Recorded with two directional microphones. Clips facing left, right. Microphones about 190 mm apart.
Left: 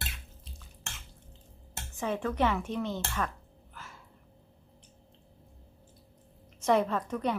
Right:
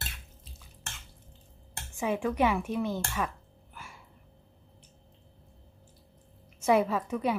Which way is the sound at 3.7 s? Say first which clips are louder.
Right 1 dB; 10° right (ahead or behind).